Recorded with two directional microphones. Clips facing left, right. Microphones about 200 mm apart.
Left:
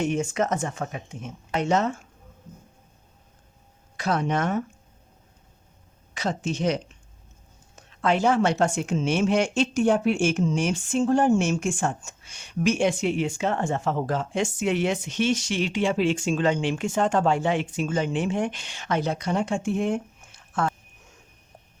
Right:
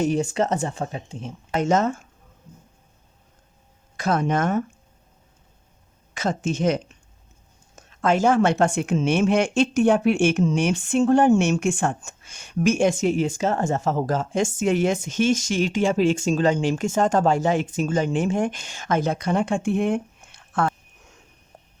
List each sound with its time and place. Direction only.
0.0 s speech: 35° right (ahead or behind)
1.5 s a woman's voice: 45° right (ahead or behind)
3.9 s a woman's voice: 45° right (ahead or behind)
6.1 s a woman's voice: 50° right (ahead or behind)
7.8 s a woman's voice: 45° right (ahead or behind); by 20.7 s 60° right (ahead or behind)